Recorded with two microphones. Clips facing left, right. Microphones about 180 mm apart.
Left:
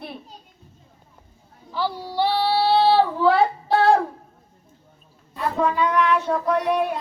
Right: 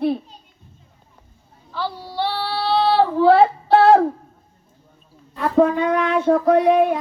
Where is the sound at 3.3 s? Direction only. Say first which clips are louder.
Right 8 dB; 45° right (ahead or behind).